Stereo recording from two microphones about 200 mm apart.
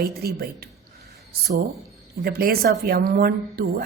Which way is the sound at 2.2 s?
50° right (ahead or behind).